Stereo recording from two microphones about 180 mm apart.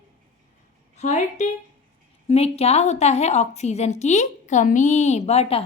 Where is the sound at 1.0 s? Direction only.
40° left (ahead or behind).